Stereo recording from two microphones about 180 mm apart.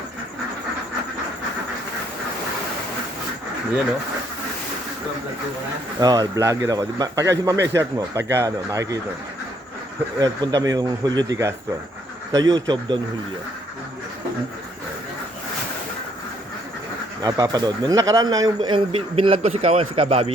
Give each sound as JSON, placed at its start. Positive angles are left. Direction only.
{"t": 6.0, "sound": "a man's voice", "side_deg": -20}
{"t": 10.2, "sound": "a man's voice", "side_deg": -20}
{"t": 17.2, "sound": "a man's voice", "side_deg": -20}